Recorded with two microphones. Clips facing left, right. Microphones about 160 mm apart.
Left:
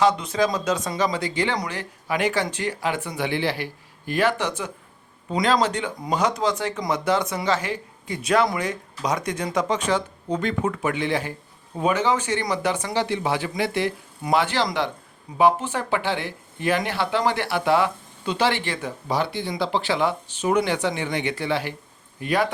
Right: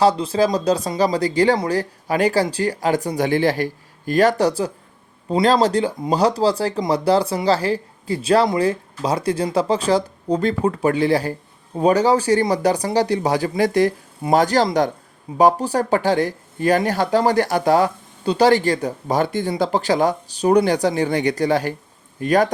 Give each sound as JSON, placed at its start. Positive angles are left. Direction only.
{"t": 0.0, "sound": "speech", "side_deg": -30}